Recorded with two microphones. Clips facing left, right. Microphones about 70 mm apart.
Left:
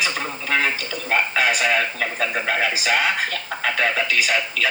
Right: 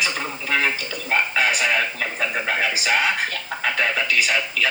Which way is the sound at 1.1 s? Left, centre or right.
Centre.